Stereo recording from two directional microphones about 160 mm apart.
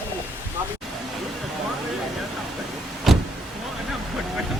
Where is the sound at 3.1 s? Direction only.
Centre (ahead or behind).